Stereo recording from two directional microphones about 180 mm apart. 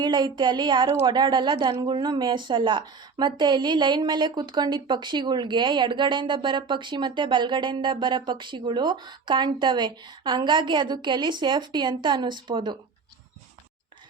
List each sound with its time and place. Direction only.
0.0 s a woman's voice: 25° right (ahead or behind)